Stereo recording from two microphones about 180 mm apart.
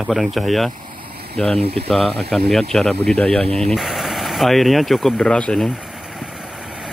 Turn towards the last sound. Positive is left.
turn(degrees=0)  # may be behind; listen again after turning